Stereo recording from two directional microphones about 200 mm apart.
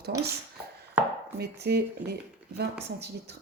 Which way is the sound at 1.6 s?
55° right (ahead or behind).